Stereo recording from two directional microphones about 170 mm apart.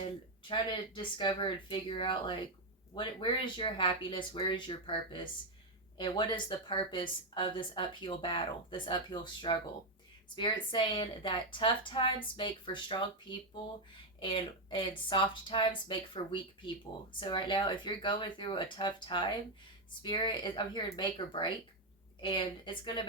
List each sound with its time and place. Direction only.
0.0 s speech: 30° left (ahead or behind)